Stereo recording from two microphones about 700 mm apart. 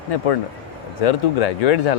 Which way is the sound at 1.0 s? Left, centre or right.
Left.